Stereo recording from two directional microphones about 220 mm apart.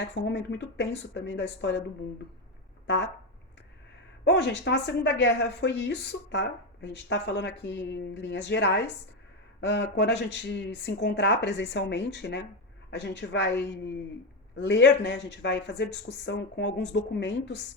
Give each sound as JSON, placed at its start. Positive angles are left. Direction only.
{"t": 0.0, "sound": "a woman's voice", "side_deg": 50}
{"t": 2.8, "sound": "a sound", "side_deg": 50}
{"t": 4.2, "sound": "a woman's voice", "side_deg": 50}